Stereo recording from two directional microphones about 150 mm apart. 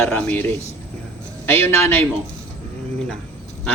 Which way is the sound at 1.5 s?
15° left (ahead or behind).